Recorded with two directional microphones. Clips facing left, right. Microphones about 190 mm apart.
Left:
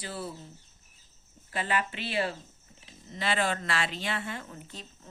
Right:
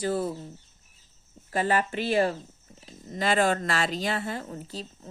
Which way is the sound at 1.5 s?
40° right (ahead or behind).